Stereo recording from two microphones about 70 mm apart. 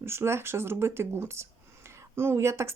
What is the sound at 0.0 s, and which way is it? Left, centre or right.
Speech, right.